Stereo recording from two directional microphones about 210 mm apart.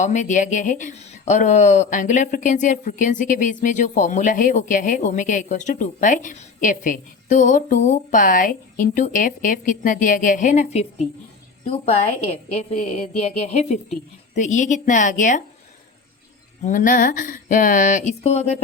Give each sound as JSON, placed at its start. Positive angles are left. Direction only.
{"t": 0.0, "sound": "speech", "side_deg": 35}
{"t": 16.6, "sound": "speech", "side_deg": 40}